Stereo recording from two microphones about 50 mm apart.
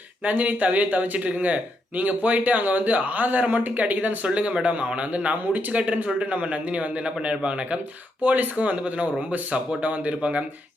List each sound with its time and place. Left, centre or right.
0.3 s speech: right